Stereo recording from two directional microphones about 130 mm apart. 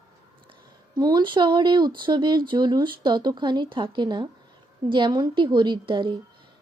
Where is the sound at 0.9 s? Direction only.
35° right (ahead or behind).